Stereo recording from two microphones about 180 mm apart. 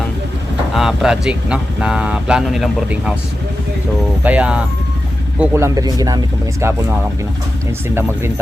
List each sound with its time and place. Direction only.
0.7 s speech: 5° right (ahead or behind)
4.2 s speech: 10° right (ahead or behind)